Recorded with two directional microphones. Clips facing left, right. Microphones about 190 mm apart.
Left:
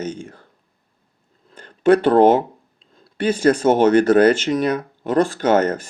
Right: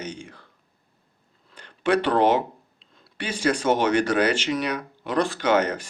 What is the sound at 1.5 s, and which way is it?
Speech, 45° left (ahead or behind).